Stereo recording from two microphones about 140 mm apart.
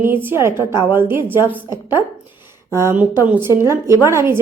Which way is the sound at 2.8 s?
15° right (ahead or behind).